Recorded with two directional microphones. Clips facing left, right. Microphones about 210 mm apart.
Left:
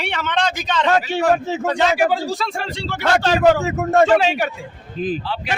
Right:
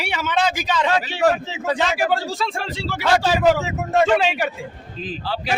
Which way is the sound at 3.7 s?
50° left (ahead or behind).